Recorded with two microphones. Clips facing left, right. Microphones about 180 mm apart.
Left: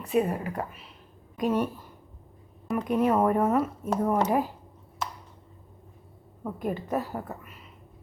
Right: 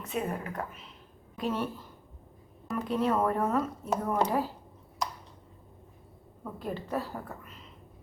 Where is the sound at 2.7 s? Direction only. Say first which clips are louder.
Left 4 dB; 15° left (ahead or behind).